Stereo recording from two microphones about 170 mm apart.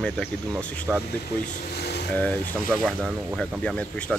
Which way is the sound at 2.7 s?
5° left (ahead or behind).